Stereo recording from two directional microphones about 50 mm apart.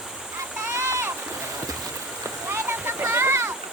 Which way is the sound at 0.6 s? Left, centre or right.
Right.